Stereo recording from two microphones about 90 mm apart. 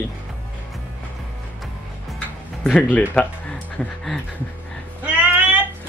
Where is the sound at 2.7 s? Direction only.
15° left (ahead or behind).